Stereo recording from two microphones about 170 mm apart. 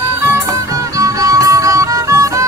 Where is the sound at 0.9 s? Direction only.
20° right (ahead or behind).